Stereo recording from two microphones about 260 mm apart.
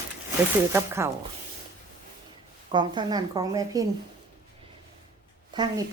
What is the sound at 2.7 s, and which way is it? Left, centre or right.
Speech, centre.